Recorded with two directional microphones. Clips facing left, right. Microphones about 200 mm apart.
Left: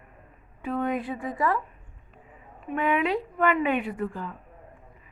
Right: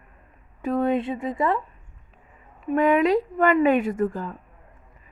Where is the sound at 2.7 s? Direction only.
40° right (ahead or behind).